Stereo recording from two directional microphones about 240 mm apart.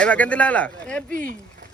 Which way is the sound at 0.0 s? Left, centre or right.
Centre.